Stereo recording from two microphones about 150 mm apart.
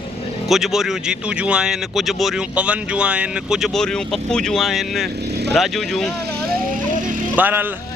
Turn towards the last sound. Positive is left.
turn(degrees=-15)  # may be behind; listen again after turning